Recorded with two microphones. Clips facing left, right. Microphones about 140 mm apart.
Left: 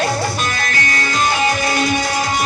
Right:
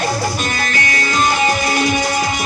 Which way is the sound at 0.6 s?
45° left (ahead or behind).